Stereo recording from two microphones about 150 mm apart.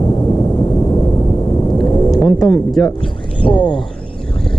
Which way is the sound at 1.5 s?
30° left (ahead or behind).